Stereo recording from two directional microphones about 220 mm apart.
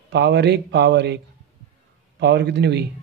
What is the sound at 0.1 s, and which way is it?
Speech, 50° right (ahead or behind).